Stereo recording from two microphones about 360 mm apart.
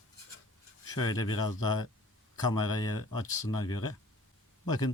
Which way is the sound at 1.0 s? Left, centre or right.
Left.